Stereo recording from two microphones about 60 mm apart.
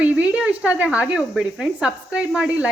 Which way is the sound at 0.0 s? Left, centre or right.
Right.